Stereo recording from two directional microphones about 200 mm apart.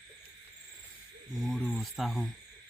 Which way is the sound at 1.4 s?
Centre (ahead or behind).